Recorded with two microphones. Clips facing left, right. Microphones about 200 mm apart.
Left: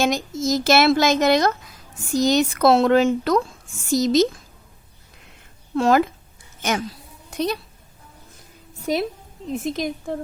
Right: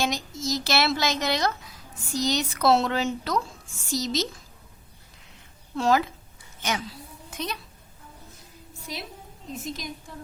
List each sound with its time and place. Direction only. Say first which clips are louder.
0.0 s a woman's voice: left 7 dB; 50° left (ahead or behind)
5.7 s a woman's voice: left 5 dB; 55° left (ahead or behind); by 7.6 s 35° left (ahead or behind)
9.5 s a woman's voice: left 10 dB; 55° left (ahead or behind)